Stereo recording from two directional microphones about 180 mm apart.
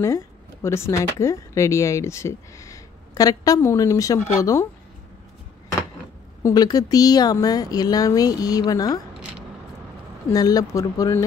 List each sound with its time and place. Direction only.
0.0 s speech: 15° left (ahead or behind)
6.4 s speech: 20° left (ahead or behind)
10.3 s speech: 20° left (ahead or behind)